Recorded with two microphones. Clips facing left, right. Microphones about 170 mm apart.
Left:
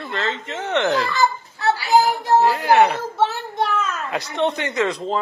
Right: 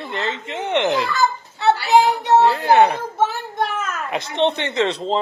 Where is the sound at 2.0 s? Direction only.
25° right (ahead or behind).